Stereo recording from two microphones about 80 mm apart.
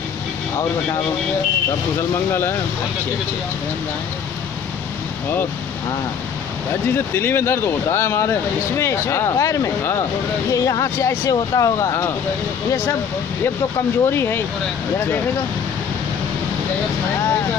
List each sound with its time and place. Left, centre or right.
7.2 s speech: left
13.7 s speech: left